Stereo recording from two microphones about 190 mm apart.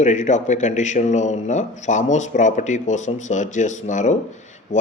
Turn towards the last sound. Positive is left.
turn(degrees=40)  # may be behind; listen again after turning